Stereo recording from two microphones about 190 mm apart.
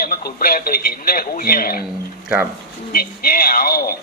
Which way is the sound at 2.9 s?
50° left (ahead or behind).